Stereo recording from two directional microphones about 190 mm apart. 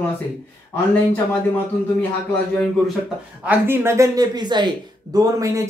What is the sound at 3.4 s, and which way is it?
Speech, 10° right (ahead or behind).